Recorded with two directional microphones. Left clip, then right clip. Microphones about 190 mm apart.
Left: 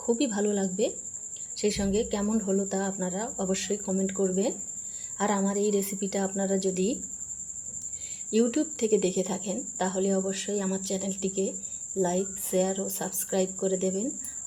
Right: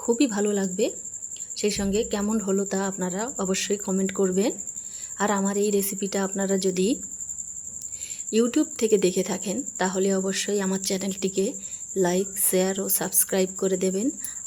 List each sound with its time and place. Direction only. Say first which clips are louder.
0.0 s speech: right 4 dB; 25° right (ahead or behind)
8.3 s speech: right 3 dB; 20° right (ahead or behind)